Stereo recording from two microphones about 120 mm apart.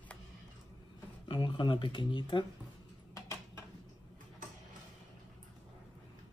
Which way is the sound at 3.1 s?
25° left (ahead or behind).